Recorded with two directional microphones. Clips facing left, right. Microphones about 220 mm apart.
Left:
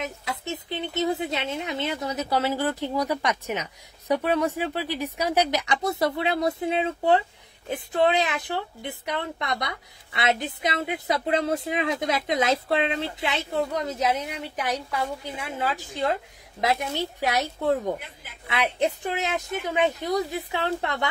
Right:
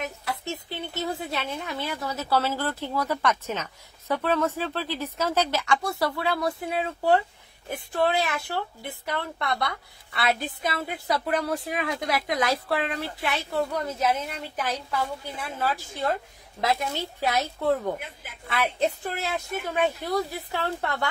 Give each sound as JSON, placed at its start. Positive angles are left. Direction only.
{"t": 0.0, "sound": "speech", "side_deg": 20}
{"t": 17.2, "sound": "speech", "side_deg": 15}